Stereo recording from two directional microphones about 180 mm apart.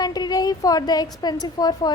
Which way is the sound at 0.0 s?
20° left (ahead or behind).